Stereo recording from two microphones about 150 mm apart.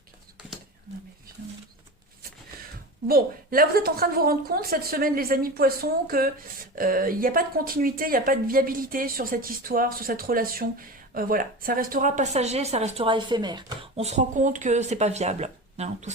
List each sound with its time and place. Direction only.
3.1 s a woman's voice: 80° right; by 13.1 s 45° right (ahead or behind)
13.1 s speech: 30° right (ahead or behind)
13.9 s speech: 45° right (ahead or behind)